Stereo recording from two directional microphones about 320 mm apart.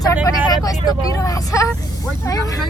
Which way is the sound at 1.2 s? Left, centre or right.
Centre.